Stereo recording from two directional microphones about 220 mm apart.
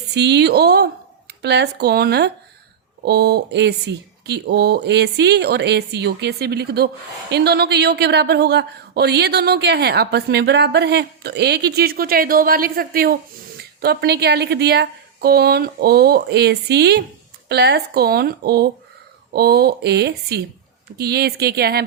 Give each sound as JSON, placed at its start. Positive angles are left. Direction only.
{"t": 0.1, "sound": "speech", "side_deg": -50}